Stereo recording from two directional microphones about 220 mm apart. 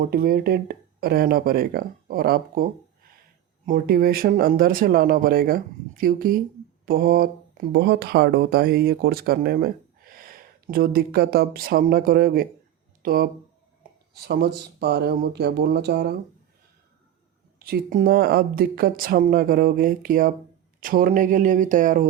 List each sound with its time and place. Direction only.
0.0 s speech: 45° right (ahead or behind)
3.7 s speech: 45° right (ahead or behind)
17.6 s speech: 40° right (ahead or behind)